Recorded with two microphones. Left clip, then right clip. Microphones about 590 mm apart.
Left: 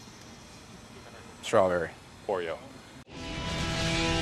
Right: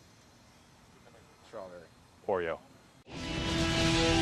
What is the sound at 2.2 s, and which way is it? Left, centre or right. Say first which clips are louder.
Speech: left 1 dB; right.